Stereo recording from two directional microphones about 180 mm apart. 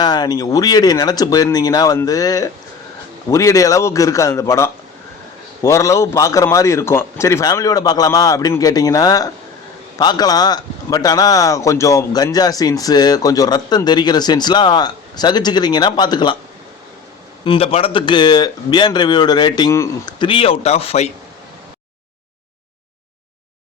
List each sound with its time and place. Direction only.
0.0 s a man's voice: 20° left (ahead or behind)
17.4 s a man's voice: 30° left (ahead or behind)